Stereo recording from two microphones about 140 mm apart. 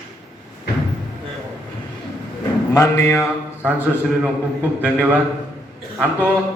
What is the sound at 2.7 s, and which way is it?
Speech, 20° left (ahead or behind).